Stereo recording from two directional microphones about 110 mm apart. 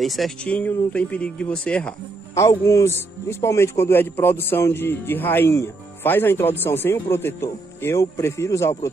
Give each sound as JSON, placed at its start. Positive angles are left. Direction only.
{"t": 0.0, "sound": "speech", "side_deg": 0}
{"t": 2.3, "sound": "a man's voice", "side_deg": 30}